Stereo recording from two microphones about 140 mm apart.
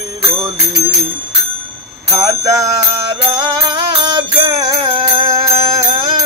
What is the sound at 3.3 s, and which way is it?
Music, 30° right (ahead or behind).